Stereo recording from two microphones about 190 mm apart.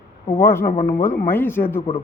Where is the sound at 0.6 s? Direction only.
50° left (ahead or behind).